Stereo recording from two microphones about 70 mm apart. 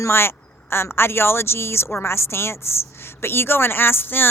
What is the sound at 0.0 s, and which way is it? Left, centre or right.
A woman's voice, left.